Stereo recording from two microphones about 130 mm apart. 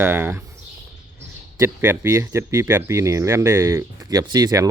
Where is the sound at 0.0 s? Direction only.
15° right (ahead or behind).